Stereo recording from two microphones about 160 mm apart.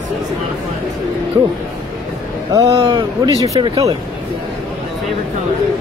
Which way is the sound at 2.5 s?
20° right (ahead or behind).